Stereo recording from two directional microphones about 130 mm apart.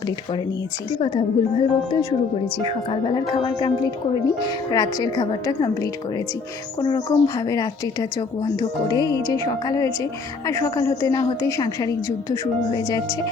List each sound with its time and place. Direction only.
1.0 s a woman's voice: 40° left (ahead or behind)